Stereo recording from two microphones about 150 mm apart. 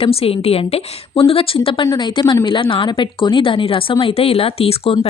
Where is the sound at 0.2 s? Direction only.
40° left (ahead or behind).